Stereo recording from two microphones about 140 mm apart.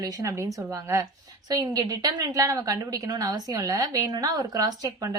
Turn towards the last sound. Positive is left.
turn(degrees=-25)  # may be behind; listen again after turning